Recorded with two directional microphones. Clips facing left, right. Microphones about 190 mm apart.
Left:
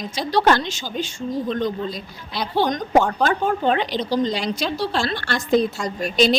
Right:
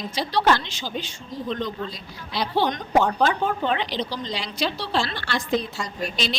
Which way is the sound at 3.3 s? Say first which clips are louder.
Left 4 dB; 45° left (ahead or behind).